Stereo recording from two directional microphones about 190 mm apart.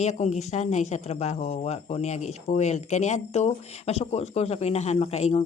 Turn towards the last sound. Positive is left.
turn(degrees=35)  # may be behind; listen again after turning